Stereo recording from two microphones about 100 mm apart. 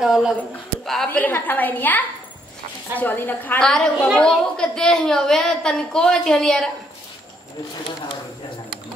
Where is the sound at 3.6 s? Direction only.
5° left (ahead or behind).